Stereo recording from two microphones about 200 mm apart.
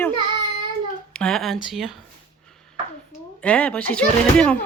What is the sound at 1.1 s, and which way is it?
Speech, 5° left (ahead or behind).